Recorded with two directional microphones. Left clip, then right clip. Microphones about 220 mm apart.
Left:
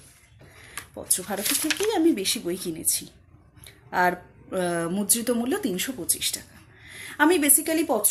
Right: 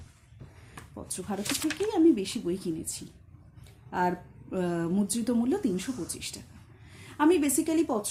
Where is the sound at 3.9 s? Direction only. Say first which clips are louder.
Left 6 dB; 10° left (ahead or behind).